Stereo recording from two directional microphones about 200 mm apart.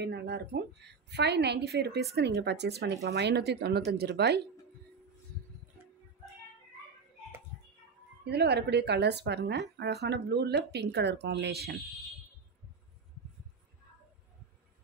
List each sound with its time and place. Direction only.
0.0 s speech: 55° right (ahead or behind)
8.2 s speech: 55° right (ahead or behind)